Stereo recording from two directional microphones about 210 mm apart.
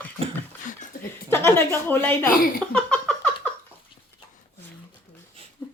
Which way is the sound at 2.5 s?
5° left (ahead or behind).